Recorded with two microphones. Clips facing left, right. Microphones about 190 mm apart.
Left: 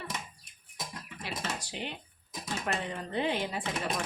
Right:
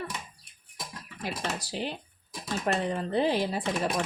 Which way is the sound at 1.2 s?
35° right (ahead or behind).